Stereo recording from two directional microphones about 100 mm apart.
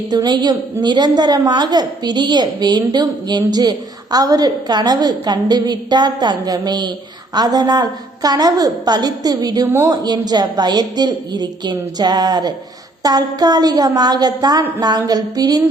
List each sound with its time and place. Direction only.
0.1 s a woman's voice: 45° right (ahead or behind)